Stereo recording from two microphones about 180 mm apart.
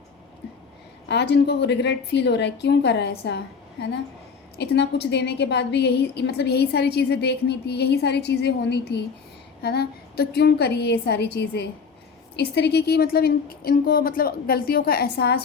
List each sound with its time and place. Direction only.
1.0 s a woman's voice: 70° left (ahead or behind)